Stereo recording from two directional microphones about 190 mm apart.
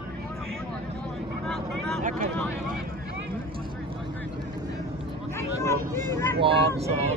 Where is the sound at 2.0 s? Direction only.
40° right (ahead or behind).